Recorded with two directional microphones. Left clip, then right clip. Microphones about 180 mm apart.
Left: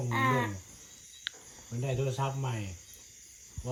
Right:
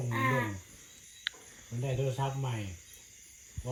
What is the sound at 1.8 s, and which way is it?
Speech, centre (ahead or behind).